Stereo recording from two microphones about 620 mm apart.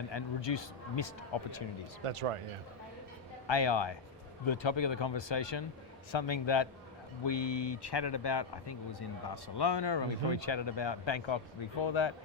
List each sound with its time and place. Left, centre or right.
0.1 s a man's voice: left
2.0 s speech: right
3.4 s a man's voice: left